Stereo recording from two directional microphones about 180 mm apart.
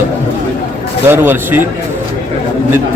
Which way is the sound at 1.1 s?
10° right (ahead or behind).